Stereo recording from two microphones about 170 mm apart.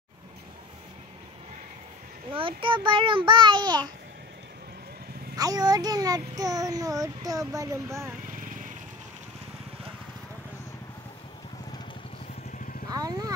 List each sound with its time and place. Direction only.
2.3 s speech: 30° right (ahead or behind)
5.3 s speech: 20° right (ahead or behind)
8.3 s vehicle: 55° right (ahead or behind)
12.9 s speech: 20° right (ahead or behind)